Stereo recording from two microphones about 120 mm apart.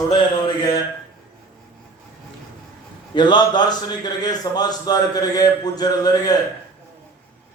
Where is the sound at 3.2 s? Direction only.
40° left (ahead or behind).